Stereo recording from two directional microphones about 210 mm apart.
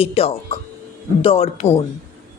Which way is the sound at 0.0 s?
30° left (ahead or behind).